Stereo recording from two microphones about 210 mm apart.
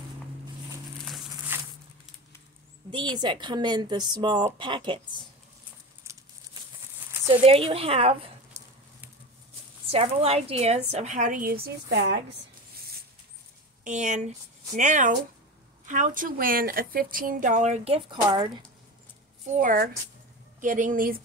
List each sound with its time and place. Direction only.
1.5 s a sound: 10° right (ahead or behind)
2.9 s speech: 20° right (ahead or behind)
6.0 s crumpling: 15° right (ahead or behind)
7.4 s speech: 25° right (ahead or behind)
9.8 s a woman's voice: 30° right (ahead or behind); by 12.2 s 55° right (ahead or behind)
13.8 s a woman's voice: 35° right (ahead or behind)
19.4 s a woman's voice: 35° right (ahead or behind)